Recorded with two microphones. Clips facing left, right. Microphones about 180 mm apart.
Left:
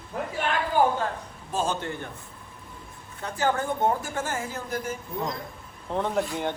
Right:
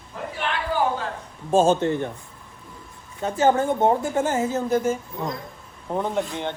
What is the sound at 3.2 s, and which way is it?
A woman's voice, 20° right (ahead or behind).